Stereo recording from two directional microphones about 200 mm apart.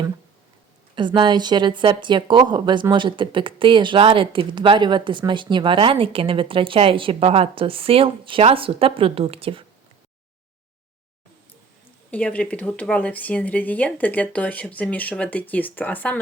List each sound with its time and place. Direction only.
0.9 s a woman's voice: 25° right (ahead or behind)
12.1 s speech: 5° left (ahead or behind)